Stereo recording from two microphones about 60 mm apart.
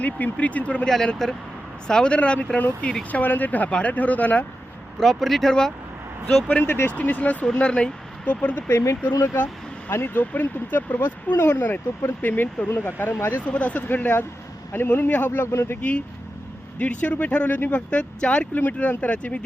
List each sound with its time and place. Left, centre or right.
0.0 s speech: left
0.9 s speech: centre
2.6 s speech: left
4.9 s speech: centre
6.6 s speech: left; by 8.3 s centre
8.3 s speech: left
8.7 s speech: left
9.9 s speech: left
13.5 s speech: left